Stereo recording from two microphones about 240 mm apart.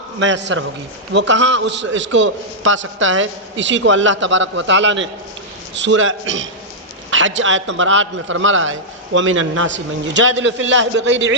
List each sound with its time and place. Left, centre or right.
0.2 s a man's voice: right